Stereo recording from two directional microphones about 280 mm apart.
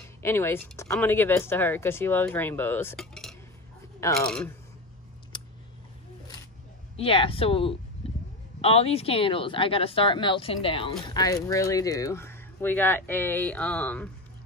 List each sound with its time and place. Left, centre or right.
0.2 s speech: centre
5.3 s a sound: centre
7.0 s speech: centre